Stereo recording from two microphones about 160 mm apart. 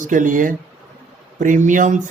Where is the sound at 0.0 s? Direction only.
55° right (ahead or behind).